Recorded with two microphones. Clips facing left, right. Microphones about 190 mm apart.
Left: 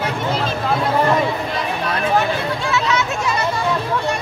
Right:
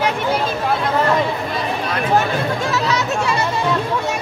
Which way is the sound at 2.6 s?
40° right (ahead or behind).